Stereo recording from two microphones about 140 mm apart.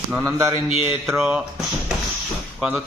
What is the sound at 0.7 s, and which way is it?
Mantra, 40° left (ahead or behind).